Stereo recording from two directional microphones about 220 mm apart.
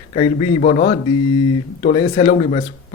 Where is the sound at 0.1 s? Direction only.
25° left (ahead or behind).